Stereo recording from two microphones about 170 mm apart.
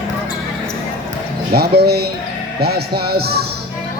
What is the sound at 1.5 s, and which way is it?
Speech, 70° right (ahead or behind).